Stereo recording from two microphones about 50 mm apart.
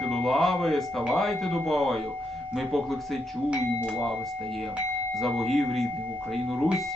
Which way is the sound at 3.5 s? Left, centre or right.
Centre.